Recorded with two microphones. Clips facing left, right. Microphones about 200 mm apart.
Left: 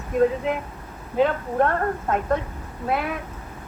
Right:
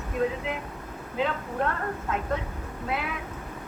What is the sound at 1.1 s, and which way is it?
Speech, 50° left (ahead or behind).